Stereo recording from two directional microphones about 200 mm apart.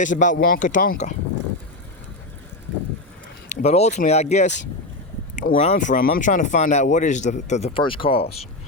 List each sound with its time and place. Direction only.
0.0 s speech: 40° left (ahead or behind)
3.5 s speech: 30° left (ahead or behind)